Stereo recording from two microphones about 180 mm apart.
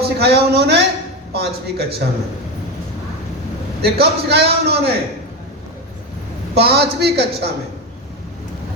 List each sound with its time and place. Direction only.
0.0 s a man's voice: 65° right (ahead or behind)
3.8 s a man's voice: 60° right (ahead or behind)
6.5 s a man's voice: 60° right (ahead or behind)